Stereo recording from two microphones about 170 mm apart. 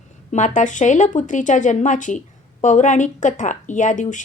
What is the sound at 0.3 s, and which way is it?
Speech, 45° left (ahead or behind).